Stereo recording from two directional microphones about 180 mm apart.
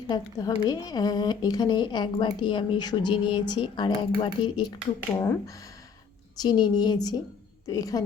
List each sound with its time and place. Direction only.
0.1 s speech: 20° left (ahead or behind)
5.1 s speech: 15° left (ahead or behind)